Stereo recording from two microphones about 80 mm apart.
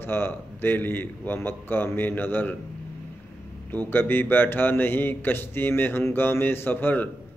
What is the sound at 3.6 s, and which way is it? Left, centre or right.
A man's voice, left.